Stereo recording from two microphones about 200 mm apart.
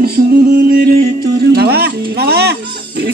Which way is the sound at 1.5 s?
50° right (ahead or behind).